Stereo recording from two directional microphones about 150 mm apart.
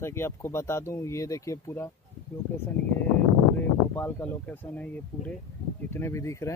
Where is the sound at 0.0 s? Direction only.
15° left (ahead or behind).